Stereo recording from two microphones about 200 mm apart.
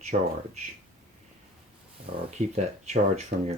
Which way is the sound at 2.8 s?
35° right (ahead or behind).